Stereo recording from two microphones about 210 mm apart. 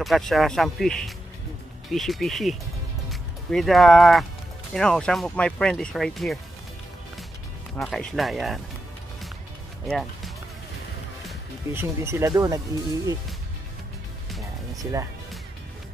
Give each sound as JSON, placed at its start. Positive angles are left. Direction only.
{"t": 0.0, "sound": "speech", "side_deg": 0}
{"t": 7.7, "sound": "speech", "side_deg": 5}
{"t": 9.8, "sound": "speech", "side_deg": 0}
{"t": 11.7, "sound": "speech", "side_deg": -10}
{"t": 14.8, "sound": "speech", "side_deg": -15}